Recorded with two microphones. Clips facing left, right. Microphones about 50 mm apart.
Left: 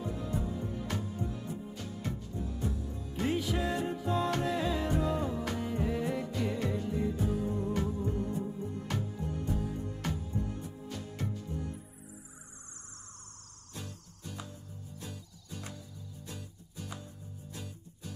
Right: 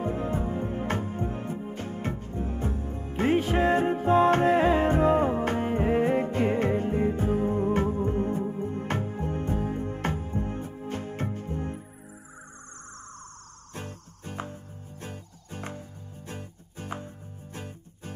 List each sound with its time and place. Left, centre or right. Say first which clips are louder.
0.0 s music: right 7 dB; right
13.7 s music: right 6 dB; right